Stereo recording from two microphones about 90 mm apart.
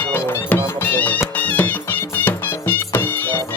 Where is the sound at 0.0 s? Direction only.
25° left (ahead or behind).